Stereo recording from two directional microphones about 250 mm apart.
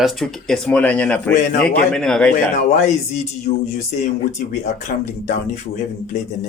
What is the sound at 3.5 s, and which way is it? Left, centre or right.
Speech, left.